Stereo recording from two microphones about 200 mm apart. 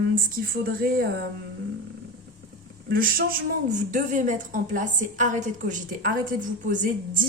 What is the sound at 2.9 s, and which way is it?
A woman's voice, 45° right (ahead or behind).